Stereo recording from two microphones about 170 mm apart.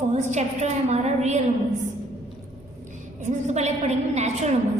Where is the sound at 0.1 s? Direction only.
45° right (ahead or behind).